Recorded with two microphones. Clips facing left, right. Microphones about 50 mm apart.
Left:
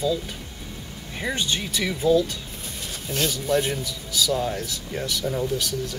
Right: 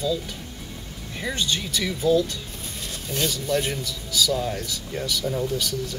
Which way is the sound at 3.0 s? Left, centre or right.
Centre.